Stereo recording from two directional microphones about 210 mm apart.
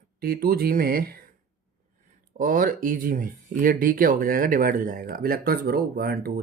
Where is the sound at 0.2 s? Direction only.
45° right (ahead or behind).